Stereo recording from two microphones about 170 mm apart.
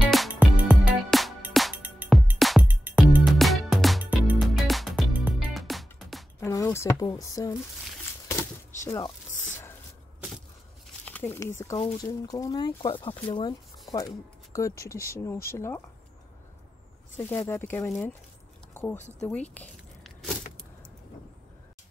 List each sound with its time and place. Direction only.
0.1 s music: 5° right (ahead or behind)
2.0 s music: 10° right (ahead or behind)
2.3 s music: centre (ahead or behind)
4.4 s music: centre (ahead or behind)
6.4 s speech: 15° left (ahead or behind)
8.8 s speech: 15° left (ahead or behind)
11.1 s speech: 10° left (ahead or behind)
11.7 s speech: 35° left (ahead or behind)
12.0 s speech: 20° left (ahead or behind)
17.5 s speech: 15° left (ahead or behind)
18.7 s a sound: 10° left (ahead or behind)